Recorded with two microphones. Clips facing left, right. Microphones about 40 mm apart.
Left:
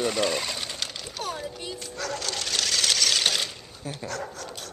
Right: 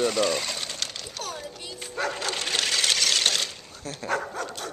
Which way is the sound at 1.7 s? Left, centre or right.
Right.